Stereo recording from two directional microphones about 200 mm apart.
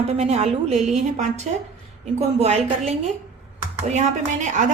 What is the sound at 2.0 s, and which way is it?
A woman's voice, 30° right (ahead or behind).